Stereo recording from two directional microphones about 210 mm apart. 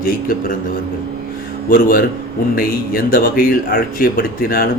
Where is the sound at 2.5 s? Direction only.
45° left (ahead or behind).